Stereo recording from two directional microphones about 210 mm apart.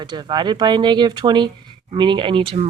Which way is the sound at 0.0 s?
20° right (ahead or behind).